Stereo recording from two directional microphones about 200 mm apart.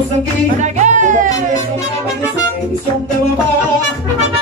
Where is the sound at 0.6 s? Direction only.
35° right (ahead or behind).